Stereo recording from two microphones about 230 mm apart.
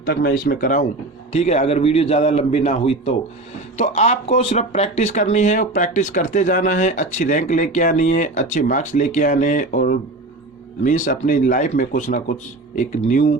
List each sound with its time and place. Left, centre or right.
0.0 s a man's voice: left